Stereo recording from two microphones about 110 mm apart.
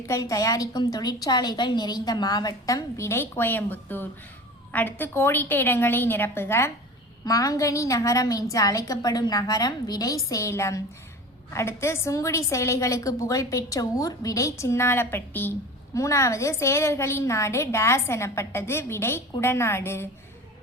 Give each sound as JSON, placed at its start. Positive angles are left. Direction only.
{"t": 0.0, "sound": "a woman's voice", "side_deg": 30}
{"t": 7.3, "sound": "a woman's voice", "side_deg": 30}
{"t": 16.0, "sound": "a woman's voice", "side_deg": 30}